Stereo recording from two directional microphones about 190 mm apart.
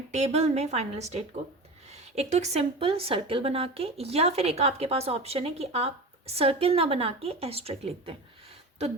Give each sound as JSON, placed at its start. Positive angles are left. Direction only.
{"t": 0.1, "sound": "a woman's voice", "side_deg": -35}